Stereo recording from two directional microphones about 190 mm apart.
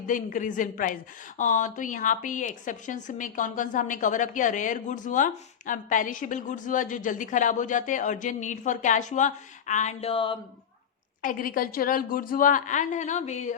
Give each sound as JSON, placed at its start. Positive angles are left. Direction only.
{"t": 0.1, "sound": "speech", "side_deg": 40}
{"t": 11.2, "sound": "speech", "side_deg": 45}